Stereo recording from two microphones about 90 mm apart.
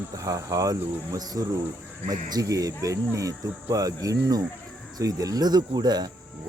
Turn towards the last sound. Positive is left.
turn(degrees=-50)  # may be behind; listen again after turning